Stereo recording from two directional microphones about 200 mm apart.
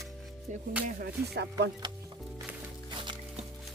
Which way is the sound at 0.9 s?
45° right (ahead or behind).